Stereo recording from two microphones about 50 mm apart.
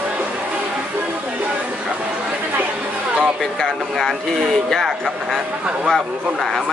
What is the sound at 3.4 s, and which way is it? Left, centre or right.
Speech, centre.